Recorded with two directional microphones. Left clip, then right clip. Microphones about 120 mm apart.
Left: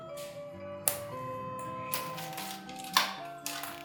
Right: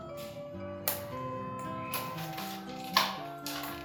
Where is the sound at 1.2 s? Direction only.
5° right (ahead or behind).